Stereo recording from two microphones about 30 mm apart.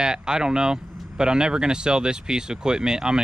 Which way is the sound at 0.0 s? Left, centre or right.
Right.